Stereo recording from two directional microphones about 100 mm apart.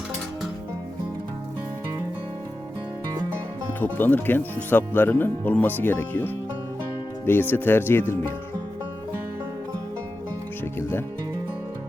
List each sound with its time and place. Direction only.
3.7 s speech: 20° left (ahead or behind)
10.6 s music: 25° left (ahead or behind)